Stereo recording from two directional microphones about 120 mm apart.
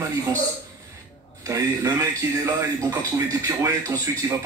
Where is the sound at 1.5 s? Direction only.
30° right (ahead or behind).